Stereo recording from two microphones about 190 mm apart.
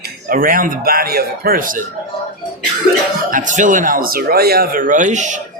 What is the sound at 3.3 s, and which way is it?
Speech, 40° right (ahead or behind).